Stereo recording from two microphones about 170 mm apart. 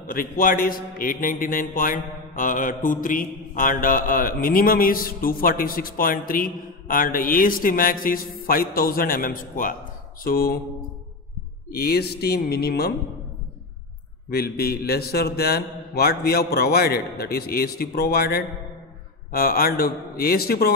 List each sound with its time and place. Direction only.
0.0 s a man's voice: 55° left (ahead or behind)
11.7 s speech: 70° left (ahead or behind)
14.3 s a man's voice: 65° left (ahead or behind)